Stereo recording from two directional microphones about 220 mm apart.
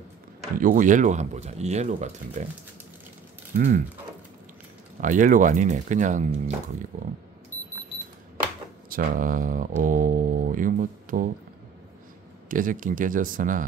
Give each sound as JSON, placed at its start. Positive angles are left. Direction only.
{"t": 0.6, "sound": "speech", "side_deg": -35}
{"t": 3.5, "sound": "speech", "side_deg": -40}
{"t": 5.0, "sound": "speech", "side_deg": -35}
{"t": 8.8, "sound": "speech", "side_deg": -40}
{"t": 12.4, "sound": "speech", "side_deg": -40}